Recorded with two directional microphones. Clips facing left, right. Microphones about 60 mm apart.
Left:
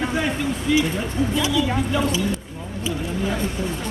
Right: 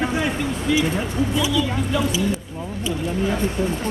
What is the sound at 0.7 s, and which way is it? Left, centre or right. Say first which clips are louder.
Speech: even; centre.